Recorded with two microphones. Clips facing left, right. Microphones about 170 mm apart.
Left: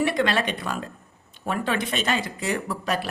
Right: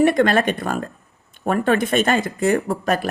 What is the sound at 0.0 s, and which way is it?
Speech, 50° right (ahead or behind).